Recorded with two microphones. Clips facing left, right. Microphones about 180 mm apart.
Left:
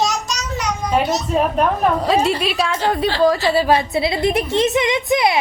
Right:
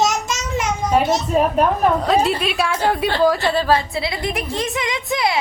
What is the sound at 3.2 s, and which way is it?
A woman's voice, 5° left (ahead or behind).